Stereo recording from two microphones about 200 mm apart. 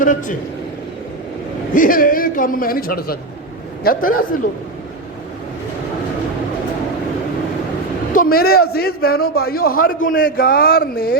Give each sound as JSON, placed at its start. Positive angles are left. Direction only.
{"t": 0.0, "sound": "a man's voice", "side_deg": 40}
{"t": 1.7, "sound": "a man's voice", "side_deg": 45}
{"t": 8.1, "sound": "a man's voice", "side_deg": 45}